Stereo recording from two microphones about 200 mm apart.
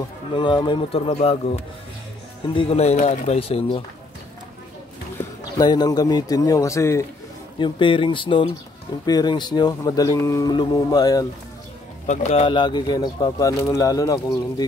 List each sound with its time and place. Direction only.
0.3 s speech: 25° left (ahead or behind)
2.5 s speech: 30° left (ahead or behind)
5.6 s a man's voice: 20° left (ahead or behind)
12.1 s speech: 35° left (ahead or behind); by 14.4 s 15° left (ahead or behind)